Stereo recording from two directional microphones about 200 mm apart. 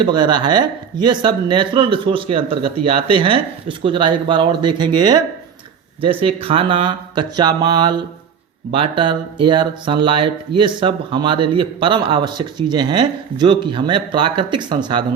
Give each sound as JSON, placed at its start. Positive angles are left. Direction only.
{"t": 0.0, "sound": "speech", "side_deg": -25}